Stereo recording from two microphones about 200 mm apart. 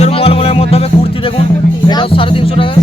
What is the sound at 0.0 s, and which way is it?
Music, 30° left (ahead or behind).